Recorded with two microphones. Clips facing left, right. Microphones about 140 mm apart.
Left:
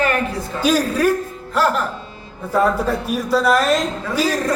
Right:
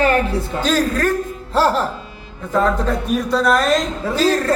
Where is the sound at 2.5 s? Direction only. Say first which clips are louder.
Even; 10° left (ahead or behind).